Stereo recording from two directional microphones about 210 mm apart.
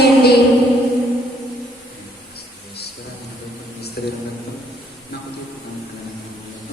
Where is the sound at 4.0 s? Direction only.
45° left (ahead or behind).